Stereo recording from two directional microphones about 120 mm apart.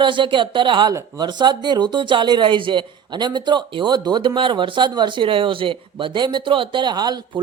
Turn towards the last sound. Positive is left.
turn(degrees=-35)  # may be behind; listen again after turning